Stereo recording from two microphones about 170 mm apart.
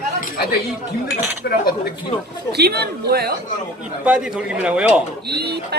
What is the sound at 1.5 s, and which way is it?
Speech, 65° left (ahead or behind).